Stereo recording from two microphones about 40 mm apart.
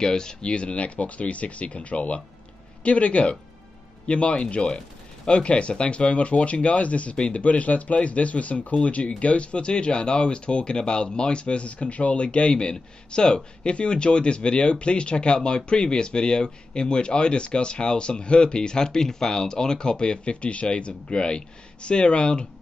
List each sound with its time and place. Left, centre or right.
0.0 s speech: centre